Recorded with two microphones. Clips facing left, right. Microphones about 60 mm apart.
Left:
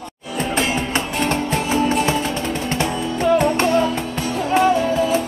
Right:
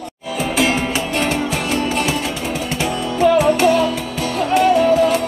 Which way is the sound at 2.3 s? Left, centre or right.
Left.